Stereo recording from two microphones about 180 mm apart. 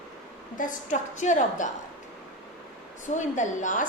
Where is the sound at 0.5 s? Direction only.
45° left (ahead or behind).